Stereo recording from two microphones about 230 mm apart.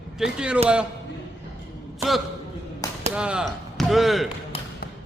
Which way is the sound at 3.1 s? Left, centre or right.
Centre.